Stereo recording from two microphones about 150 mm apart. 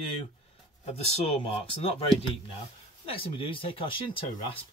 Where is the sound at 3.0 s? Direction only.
40° left (ahead or behind).